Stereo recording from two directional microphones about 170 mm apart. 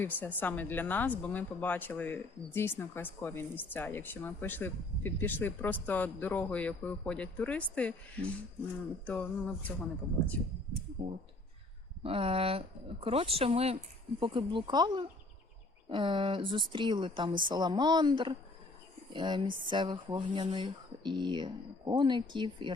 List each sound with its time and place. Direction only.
0.0 s speech: 10° left (ahead or behind)
11.0 s speech: 50° right (ahead or behind)
12.0 s speech: 35° right (ahead or behind)